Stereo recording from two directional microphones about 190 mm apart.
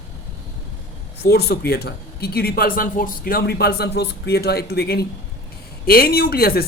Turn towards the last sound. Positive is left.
turn(degrees=55)  # may be behind; listen again after turning